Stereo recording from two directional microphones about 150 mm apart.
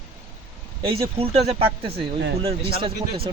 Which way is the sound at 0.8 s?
40° right (ahead or behind).